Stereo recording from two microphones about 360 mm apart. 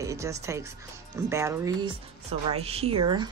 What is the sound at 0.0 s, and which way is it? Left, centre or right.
Speech, centre.